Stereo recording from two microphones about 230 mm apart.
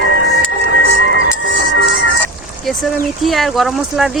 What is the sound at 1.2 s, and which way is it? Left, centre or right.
Music, left.